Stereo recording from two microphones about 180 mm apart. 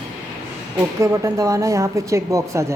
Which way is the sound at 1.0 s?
15° right (ahead or behind).